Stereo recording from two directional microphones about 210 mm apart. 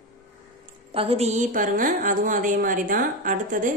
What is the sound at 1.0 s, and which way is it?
Speech, 30° right (ahead or behind).